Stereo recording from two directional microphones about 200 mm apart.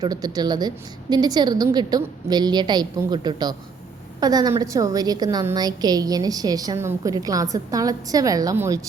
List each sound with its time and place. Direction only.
0.0 s a woman's voice: 20° right (ahead or behind)